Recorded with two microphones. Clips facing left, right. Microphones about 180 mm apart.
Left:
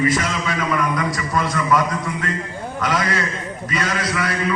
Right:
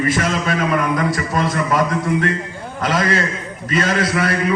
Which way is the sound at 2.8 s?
50° right (ahead or behind).